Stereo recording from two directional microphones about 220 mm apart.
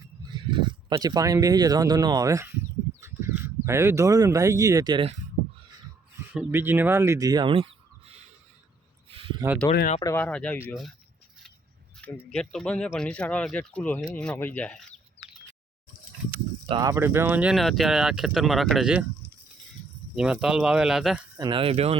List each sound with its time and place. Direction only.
0.3 s speech: 20° right (ahead or behind)
6.3 s speech: 10° right (ahead or behind); by 7.7 s 25° right (ahead or behind)
9.0 s a sound: 25° right (ahead or behind)
9.7 s speech: 40° left (ahead or behind)
10.0 s speech: 10° left (ahead or behind)
12.3 s speech: 5° left (ahead or behind)
16.6 s speech: 20° right (ahead or behind); by 19.0 s 5° right (ahead or behind)
20.1 s speech: 5° right (ahead or behind)
21.3 s speech: 20° right (ahead or behind)